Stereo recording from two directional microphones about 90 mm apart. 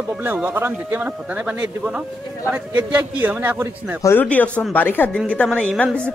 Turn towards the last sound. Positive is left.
turn(degrees=15)  # may be behind; listen again after turning